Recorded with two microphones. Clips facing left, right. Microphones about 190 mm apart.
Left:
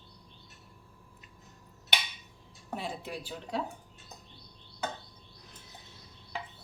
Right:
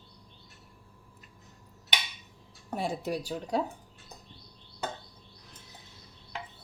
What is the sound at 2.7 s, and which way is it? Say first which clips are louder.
Speech: right 6 dB; 45° right (ahead or behind).